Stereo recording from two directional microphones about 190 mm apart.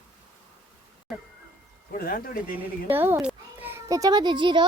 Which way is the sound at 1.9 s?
50° left (ahead or behind).